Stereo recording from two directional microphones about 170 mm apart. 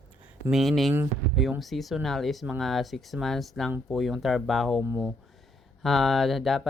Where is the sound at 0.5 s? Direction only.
Centre (ahead or behind).